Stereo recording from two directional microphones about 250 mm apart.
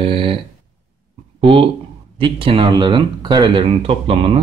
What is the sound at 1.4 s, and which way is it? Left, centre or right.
Speech, right.